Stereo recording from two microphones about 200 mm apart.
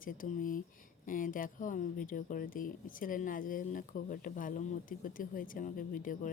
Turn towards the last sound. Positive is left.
turn(degrees=40)  # may be behind; listen again after turning